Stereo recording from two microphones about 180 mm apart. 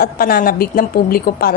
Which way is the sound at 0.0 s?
55° left (ahead or behind).